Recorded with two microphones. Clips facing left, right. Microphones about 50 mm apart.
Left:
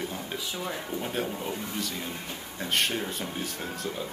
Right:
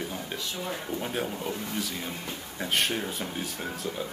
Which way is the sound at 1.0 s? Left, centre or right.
Centre.